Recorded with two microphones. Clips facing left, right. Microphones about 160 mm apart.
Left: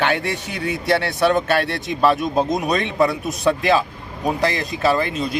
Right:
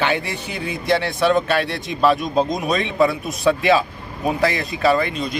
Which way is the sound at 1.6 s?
55° left (ahead or behind).